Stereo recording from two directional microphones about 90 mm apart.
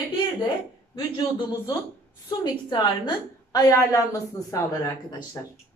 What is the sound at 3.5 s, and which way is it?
A woman's voice, 40° left (ahead or behind).